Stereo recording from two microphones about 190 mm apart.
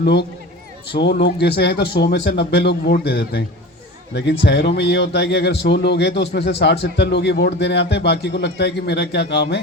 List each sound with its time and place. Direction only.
0.0 s speech: 60° left (ahead or behind)